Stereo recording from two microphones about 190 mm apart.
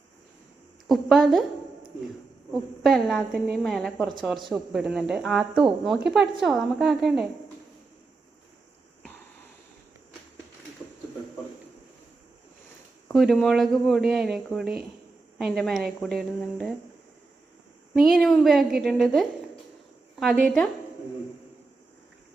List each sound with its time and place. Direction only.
0.9 s speech: centre (ahead or behind)
2.5 s speech: centre (ahead or behind)
13.1 s speech: centre (ahead or behind)
17.9 s speech: centre (ahead or behind)